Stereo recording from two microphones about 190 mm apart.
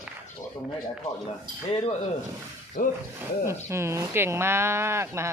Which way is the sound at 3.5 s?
15° right (ahead or behind).